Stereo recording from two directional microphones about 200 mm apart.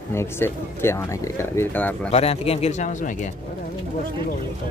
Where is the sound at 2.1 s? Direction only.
30° left (ahead or behind).